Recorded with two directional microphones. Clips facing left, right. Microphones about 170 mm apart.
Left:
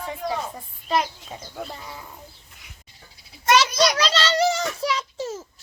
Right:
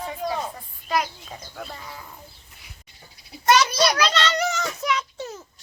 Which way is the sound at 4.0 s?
30° left (ahead or behind).